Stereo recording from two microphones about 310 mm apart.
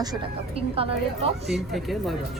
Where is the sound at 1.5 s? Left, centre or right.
Centre.